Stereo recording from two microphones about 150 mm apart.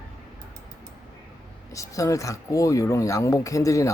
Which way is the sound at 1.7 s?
20° left (ahead or behind).